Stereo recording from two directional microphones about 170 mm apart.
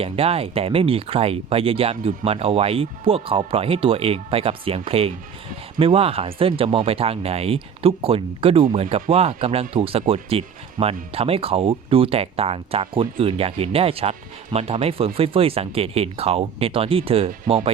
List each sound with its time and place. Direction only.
0.0 s speech: 35° right (ahead or behind)